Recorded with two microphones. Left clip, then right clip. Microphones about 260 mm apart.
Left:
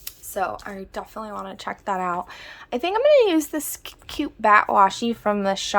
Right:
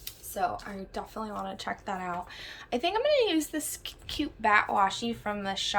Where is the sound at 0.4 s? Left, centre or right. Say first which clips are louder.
Left 5 dB; centre.